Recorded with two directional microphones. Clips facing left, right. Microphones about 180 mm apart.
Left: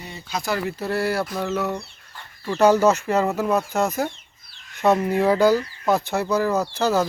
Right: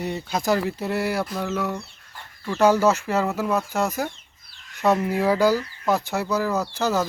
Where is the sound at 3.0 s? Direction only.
5° right (ahead or behind).